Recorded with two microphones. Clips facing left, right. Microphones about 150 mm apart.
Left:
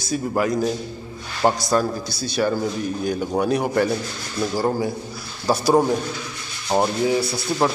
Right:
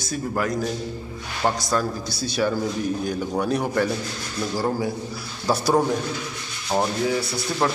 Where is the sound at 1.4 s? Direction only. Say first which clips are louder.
Left 4 dB; 25° left (ahead or behind).